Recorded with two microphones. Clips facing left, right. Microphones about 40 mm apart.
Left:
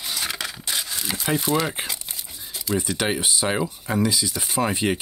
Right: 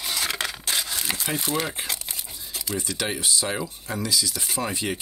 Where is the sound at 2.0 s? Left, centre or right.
Centre.